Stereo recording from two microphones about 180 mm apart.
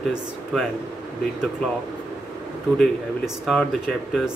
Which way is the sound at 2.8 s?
Centre (ahead or behind).